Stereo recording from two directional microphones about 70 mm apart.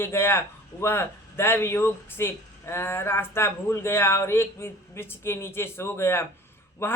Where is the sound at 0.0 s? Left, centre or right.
Left.